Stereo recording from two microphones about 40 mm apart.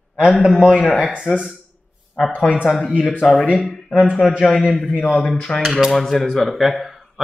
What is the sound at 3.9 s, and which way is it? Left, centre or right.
Speech, left.